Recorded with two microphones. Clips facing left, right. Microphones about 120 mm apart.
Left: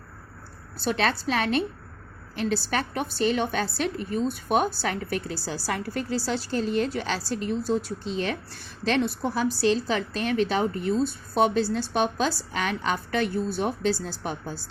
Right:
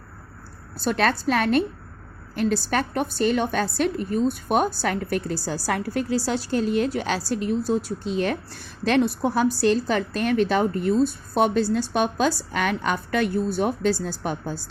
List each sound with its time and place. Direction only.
0.8 s a woman's voice: 45° right (ahead or behind)